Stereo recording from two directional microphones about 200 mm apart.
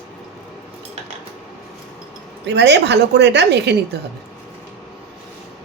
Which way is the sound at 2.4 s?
60° right (ahead or behind).